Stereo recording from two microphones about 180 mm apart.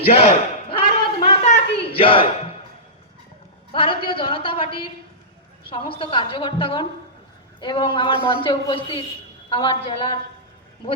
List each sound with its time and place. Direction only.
0.0 s battle cry: 30° left (ahead or behind)
2.0 s speech: 30° left (ahead or behind)
3.7 s a woman's voice: 30° left (ahead or behind)